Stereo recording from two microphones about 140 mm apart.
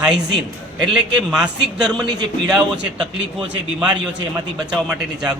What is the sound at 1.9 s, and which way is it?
Speech, 30° right (ahead or behind).